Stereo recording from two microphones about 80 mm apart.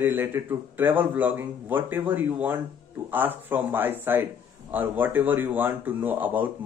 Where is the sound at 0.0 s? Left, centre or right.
Right.